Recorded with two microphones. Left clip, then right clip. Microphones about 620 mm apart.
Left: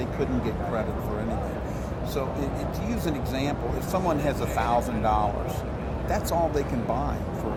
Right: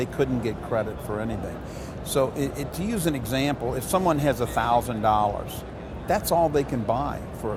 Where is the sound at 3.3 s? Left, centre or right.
Right.